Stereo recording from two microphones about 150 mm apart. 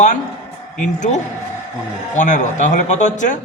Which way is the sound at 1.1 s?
45° left (ahead or behind).